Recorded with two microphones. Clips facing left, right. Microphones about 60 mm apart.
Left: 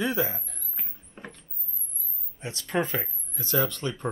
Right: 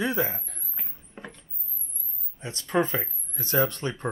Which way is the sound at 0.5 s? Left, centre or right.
Centre.